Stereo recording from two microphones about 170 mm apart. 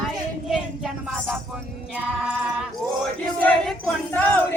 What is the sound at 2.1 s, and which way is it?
Speech, 5° right (ahead or behind).